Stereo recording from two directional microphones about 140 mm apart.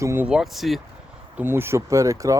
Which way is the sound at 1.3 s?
15° right (ahead or behind).